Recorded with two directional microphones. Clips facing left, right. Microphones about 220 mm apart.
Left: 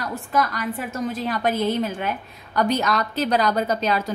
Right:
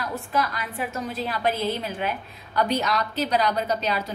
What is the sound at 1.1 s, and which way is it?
A woman's voice, 45° left (ahead or behind).